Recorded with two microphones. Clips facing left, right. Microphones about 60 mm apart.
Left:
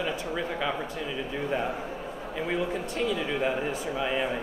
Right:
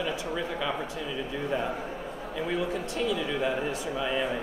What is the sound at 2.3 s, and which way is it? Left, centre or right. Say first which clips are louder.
Speech: even; left.